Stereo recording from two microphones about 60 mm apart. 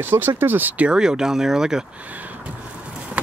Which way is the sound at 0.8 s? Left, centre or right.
Centre.